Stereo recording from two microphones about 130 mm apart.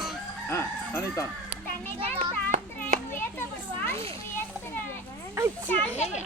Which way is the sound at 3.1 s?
15° left (ahead or behind).